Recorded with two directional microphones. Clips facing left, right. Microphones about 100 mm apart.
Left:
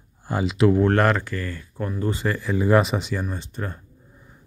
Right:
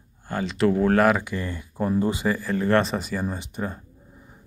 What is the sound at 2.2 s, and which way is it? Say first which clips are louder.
Speech: right 1 dB; 5° right (ahead or behind).